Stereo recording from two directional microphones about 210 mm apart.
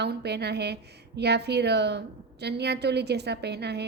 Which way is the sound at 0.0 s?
50° right (ahead or behind).